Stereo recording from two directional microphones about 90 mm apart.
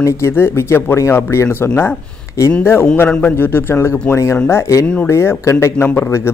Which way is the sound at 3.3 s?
25° left (ahead or behind).